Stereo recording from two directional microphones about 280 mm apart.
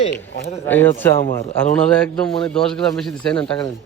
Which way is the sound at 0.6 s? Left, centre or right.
Centre.